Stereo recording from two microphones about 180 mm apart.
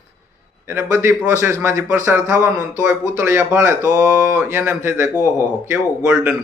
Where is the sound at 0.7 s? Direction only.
15° right (ahead or behind).